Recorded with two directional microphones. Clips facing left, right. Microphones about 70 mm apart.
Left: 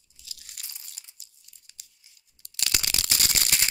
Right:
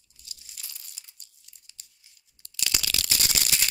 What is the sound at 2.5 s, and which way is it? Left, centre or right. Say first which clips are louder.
Tearing: even; left.